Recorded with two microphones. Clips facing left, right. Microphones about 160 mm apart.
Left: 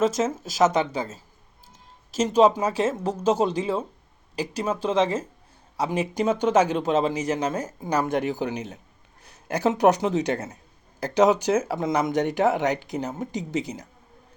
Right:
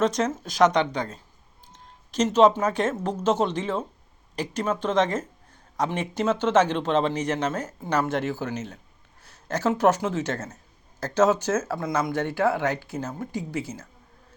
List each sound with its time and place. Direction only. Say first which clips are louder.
0.0 s speech: left 1 dB; 5° left (ahead or behind)